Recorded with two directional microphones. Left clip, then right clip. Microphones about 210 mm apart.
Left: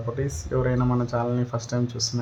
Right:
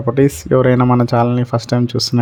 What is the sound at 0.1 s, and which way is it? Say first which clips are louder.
Speech: right 16 dB; 40° right (ahead or behind).